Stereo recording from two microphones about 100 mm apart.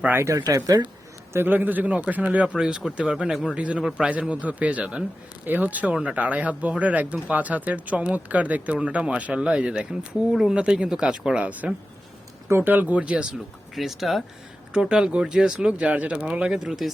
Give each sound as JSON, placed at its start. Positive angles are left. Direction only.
{"t": 0.0, "sound": "speech", "side_deg": -25}
{"t": 1.3, "sound": "speech", "side_deg": -20}
{"t": 13.7, "sound": "speech", "side_deg": 0}